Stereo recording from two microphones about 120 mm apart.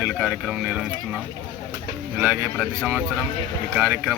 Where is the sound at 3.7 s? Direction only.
15° right (ahead or behind).